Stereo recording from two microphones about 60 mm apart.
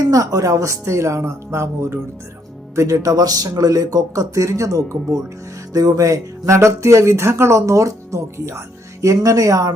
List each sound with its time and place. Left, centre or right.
0.0 s speech: right
2.7 s speech: right
5.7 s speech: right